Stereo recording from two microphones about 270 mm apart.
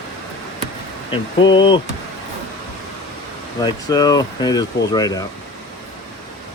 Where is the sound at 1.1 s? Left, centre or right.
Centre.